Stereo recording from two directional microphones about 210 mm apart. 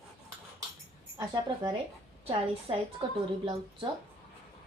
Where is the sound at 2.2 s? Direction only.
25° right (ahead or behind).